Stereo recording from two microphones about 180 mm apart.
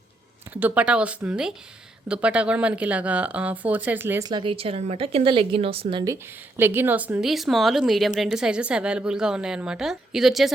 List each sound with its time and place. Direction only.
0.5 s speech: 10° right (ahead or behind)
4.3 s a woman's voice: 25° right (ahead or behind)
6.6 s speech: 10° right (ahead or behind)